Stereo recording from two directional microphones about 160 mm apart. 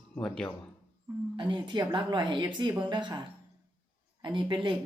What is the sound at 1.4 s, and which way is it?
A woman's voice, 30° right (ahead or behind).